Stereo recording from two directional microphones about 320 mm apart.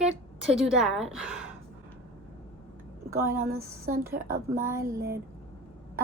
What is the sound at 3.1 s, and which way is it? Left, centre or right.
A woman's voice, centre.